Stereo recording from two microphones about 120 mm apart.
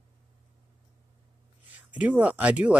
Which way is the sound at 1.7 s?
10° right (ahead or behind).